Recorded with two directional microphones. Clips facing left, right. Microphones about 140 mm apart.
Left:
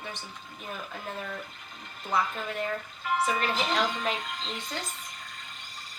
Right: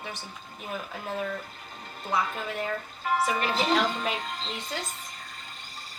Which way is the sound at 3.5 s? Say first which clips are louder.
Right 4 dB; 35° right (ahead or behind).